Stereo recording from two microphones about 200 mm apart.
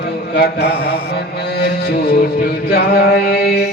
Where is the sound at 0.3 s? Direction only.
55° left (ahead or behind).